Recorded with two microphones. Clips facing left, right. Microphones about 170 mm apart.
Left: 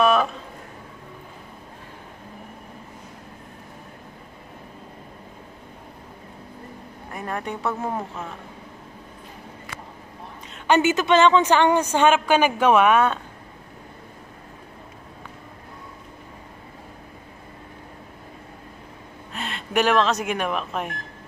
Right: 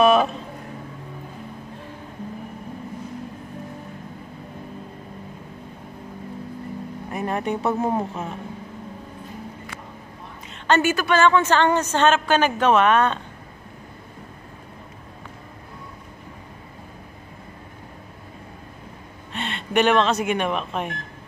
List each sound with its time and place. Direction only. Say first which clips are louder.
0.0 s a sound: right 3 dB; 20° right (ahead or behind)
7.1 s speech: right 5 dB; 20° right (ahead or behind)
10.7 s a woman's voice: left 1 dB; 20° left (ahead or behind)
19.3 s speech: right 2 dB; centre (ahead or behind)